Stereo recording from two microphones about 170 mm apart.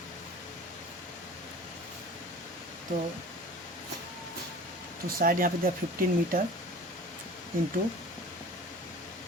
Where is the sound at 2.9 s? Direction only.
40° right (ahead or behind).